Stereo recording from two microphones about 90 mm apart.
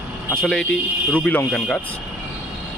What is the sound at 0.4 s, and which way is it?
Speech, 10° left (ahead or behind).